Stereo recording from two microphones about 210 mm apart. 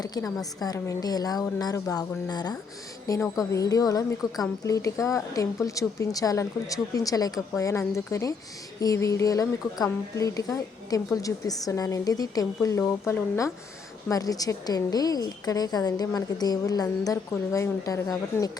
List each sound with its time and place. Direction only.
0.0 s a woman's voice: 15° left (ahead or behind)